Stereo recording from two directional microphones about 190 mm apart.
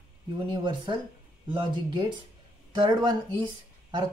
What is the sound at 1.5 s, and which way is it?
Speech, 25° right (ahead or behind).